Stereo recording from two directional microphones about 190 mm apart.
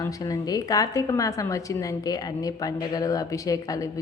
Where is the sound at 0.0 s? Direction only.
20° left (ahead or behind).